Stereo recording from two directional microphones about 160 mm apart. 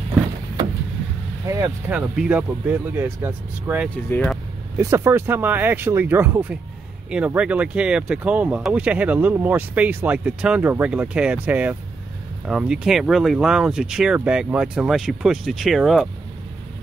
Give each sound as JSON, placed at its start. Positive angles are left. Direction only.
{"t": 1.5, "sound": "speech", "side_deg": -20}
{"t": 2.0, "sound": "speech", "side_deg": -5}
{"t": 4.1, "sound": "speech", "side_deg": 5}
{"t": 4.7, "sound": "speech", "side_deg": -15}